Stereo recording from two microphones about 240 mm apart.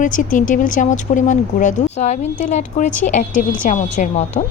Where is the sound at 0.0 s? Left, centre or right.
Left.